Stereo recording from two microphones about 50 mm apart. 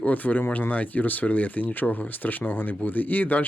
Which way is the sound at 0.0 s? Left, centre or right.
Left.